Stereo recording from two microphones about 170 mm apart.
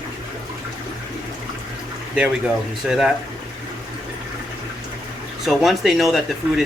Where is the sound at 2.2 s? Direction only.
5° right (ahead or behind).